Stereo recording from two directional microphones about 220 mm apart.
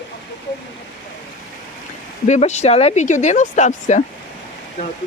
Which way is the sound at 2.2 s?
30° left (ahead or behind).